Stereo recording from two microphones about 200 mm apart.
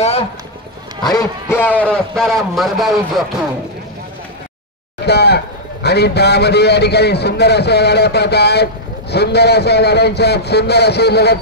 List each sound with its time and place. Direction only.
1.0 s a man's voice: 15° left (ahead or behind)
5.0 s a man's voice: 55° left (ahead or behind)